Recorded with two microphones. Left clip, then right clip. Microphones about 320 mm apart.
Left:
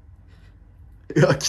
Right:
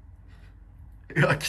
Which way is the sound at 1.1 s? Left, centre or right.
Centre.